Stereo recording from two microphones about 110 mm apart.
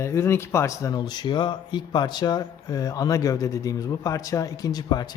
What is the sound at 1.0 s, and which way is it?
Speech, 40° left (ahead or behind).